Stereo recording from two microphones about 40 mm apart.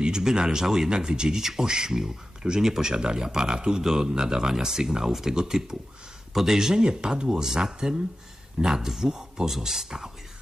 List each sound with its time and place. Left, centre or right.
0.0 s speech: centre